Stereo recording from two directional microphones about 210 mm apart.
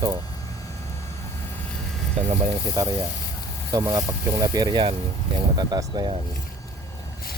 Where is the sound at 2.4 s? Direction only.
15° right (ahead or behind).